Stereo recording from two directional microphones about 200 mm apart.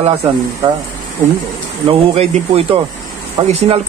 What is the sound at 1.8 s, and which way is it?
Speech, 30° right (ahead or behind).